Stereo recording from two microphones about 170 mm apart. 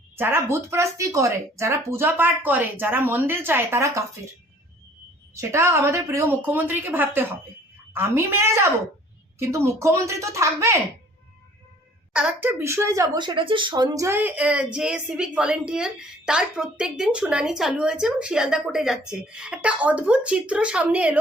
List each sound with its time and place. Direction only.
0.2 s speech: 15° right (ahead or behind)
5.3 s speech: 15° right (ahead or behind)
12.1 s a woman's voice: 10° right (ahead or behind)